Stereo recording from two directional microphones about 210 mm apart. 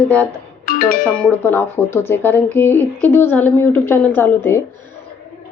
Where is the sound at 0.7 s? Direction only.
45° left (ahead or behind).